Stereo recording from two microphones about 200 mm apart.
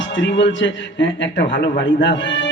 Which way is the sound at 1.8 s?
65° left (ahead or behind).